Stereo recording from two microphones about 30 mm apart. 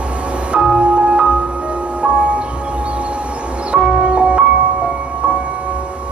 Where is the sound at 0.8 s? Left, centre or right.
Right.